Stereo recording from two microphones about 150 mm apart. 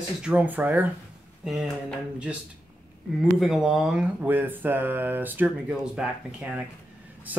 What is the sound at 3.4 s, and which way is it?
Speech, centre (ahead or behind).